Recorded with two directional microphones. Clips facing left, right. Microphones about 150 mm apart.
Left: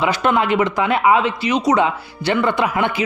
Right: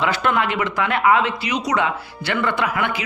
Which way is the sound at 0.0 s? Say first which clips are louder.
Left 3 dB; 15° left (ahead or behind).